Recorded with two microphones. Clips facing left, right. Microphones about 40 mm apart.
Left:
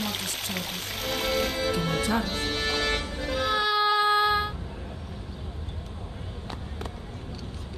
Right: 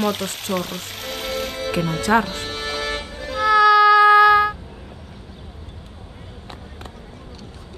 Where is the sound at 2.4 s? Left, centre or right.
Centre.